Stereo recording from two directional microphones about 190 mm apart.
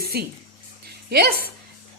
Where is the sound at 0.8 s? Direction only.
55° right (ahead or behind).